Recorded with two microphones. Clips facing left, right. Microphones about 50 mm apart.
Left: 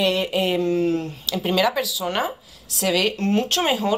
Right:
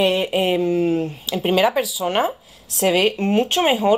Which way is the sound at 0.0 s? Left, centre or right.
Right.